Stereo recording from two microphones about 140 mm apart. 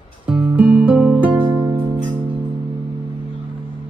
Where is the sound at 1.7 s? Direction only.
35° right (ahead or behind).